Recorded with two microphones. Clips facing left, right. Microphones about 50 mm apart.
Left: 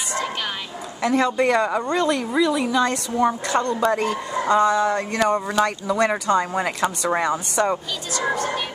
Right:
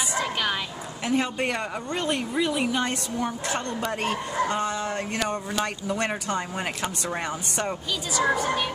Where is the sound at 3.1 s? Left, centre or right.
Left.